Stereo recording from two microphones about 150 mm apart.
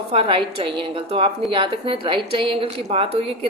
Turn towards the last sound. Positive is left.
turn(degrees=-40)  # may be behind; listen again after turning